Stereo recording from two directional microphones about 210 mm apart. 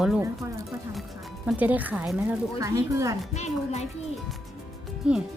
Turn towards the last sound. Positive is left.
turn(degrees=-5)  # may be behind; listen again after turning